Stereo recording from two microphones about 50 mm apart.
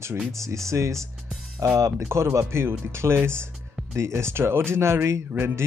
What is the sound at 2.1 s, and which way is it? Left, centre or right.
Speech, right.